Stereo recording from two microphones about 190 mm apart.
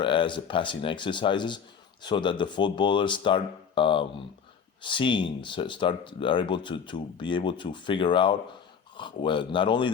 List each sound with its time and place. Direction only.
0.0 s a man's voice: 25° left (ahead or behind)